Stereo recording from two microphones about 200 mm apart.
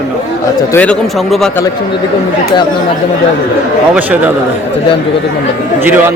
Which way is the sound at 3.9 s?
10° right (ahead or behind).